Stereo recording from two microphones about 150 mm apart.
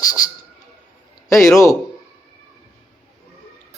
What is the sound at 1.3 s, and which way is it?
Speech, 20° left (ahead or behind).